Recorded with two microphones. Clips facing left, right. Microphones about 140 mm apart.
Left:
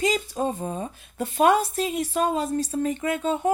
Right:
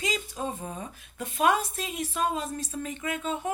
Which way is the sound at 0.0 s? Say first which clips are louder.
Left 7 dB; 40° left (ahead or behind).